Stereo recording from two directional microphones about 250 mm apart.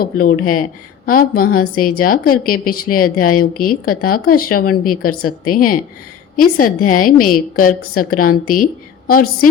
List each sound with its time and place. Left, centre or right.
0.0 s speech: left